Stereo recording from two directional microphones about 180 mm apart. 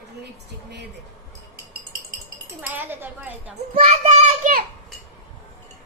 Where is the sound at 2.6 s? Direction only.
10° right (ahead or behind).